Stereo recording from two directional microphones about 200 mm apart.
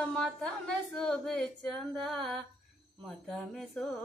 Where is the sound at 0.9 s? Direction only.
5° left (ahead or behind).